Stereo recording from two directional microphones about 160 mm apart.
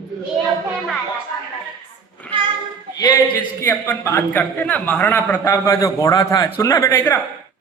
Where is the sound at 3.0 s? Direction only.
20° left (ahead or behind).